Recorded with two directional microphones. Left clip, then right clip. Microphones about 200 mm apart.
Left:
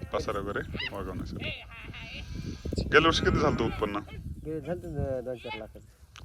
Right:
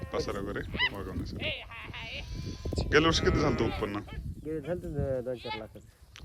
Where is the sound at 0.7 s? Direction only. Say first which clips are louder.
Right 6 dB; 50° right (ahead or behind).